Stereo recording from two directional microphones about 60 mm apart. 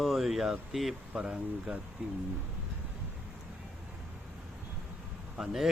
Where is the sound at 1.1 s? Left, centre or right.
Centre.